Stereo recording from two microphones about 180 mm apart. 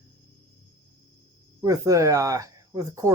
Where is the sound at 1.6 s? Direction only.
20° right (ahead or behind).